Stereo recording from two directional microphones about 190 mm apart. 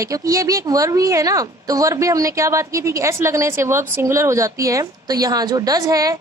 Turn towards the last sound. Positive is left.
turn(degrees=-20)  # may be behind; listen again after turning